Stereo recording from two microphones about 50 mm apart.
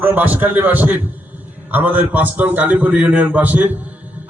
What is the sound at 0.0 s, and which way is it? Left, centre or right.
A man's voice, right.